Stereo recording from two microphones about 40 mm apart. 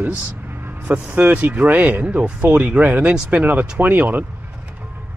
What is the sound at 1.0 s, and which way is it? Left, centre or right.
Speech, right.